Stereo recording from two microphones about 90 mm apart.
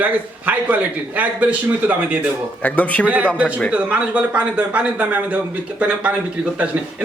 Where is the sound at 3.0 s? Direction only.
15° right (ahead or behind).